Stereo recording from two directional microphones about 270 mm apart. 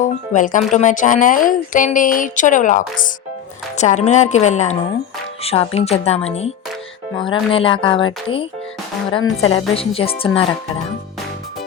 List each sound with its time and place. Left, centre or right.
0.0 s speech: left